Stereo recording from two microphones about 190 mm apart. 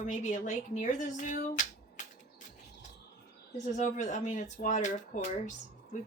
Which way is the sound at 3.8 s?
40° left (ahead or behind).